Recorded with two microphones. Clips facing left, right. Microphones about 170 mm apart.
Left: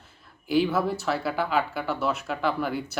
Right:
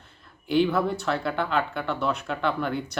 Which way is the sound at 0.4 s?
5° left (ahead or behind).